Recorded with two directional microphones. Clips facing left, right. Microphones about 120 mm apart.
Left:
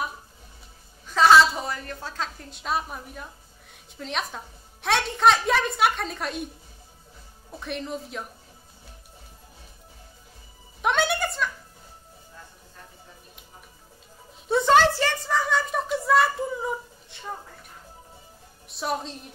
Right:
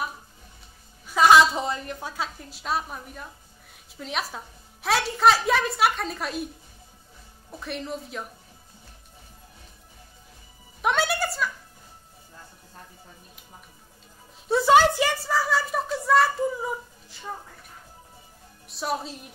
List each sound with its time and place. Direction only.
1.0 s a woman's voice: 15° right (ahead or behind)
7.6 s a woman's voice: centre (ahead or behind)
10.8 s music: centre (ahead or behind)
14.5 s a sound: 5° right (ahead or behind)
18.7 s a woman's voice: centre (ahead or behind)